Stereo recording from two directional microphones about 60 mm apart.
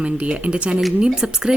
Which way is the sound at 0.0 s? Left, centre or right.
Right.